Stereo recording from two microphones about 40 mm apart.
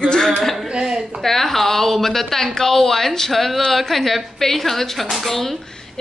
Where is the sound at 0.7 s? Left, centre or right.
Centre.